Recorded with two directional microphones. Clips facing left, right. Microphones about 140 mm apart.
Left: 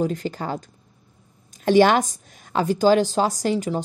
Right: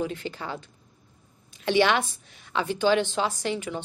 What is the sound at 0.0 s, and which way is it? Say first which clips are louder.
A woman's voice: left 6 dB; 40° left (ahead or behind).